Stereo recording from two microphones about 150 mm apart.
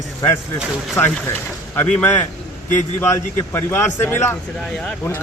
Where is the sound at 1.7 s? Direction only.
15° left (ahead or behind).